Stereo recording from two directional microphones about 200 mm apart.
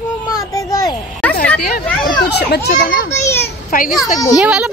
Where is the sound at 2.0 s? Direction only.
55° left (ahead or behind).